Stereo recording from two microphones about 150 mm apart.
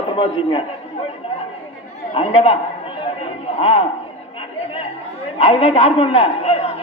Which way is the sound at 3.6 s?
35° left (ahead or behind).